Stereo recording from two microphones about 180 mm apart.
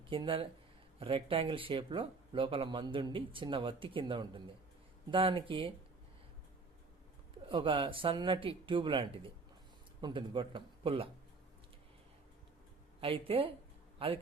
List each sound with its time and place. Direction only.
0.1 s speech: 30° right (ahead or behind)
7.4 s speech: 25° right (ahead or behind)
13.0 s speech: 30° right (ahead or behind)